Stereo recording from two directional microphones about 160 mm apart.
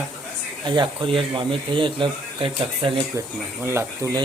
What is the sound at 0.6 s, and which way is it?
Speech, 30° right (ahead or behind).